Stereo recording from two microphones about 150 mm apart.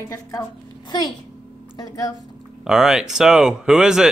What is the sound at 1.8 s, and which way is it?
Speech, 25° left (ahead or behind).